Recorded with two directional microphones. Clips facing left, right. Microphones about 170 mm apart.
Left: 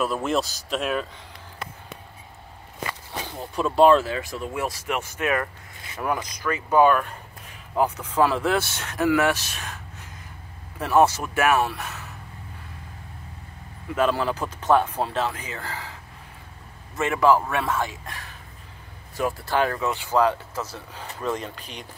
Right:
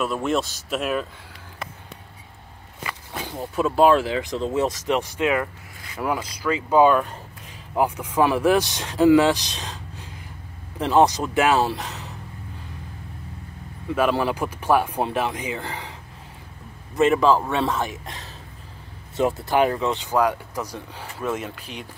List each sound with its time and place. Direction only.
0.0 s speech: centre (ahead or behind)
3.3 s speech: 10° right (ahead or behind)
10.8 s speech: 20° right (ahead or behind)
13.9 s speech: 15° right (ahead or behind)